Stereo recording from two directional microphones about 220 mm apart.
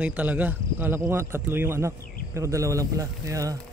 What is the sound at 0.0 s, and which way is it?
Speech, 5° right (ahead or behind).